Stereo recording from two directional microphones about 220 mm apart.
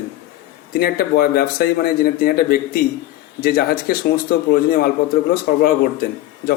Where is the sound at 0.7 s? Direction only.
45° left (ahead or behind).